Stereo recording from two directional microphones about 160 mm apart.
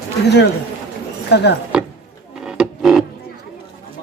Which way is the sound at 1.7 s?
5° right (ahead or behind).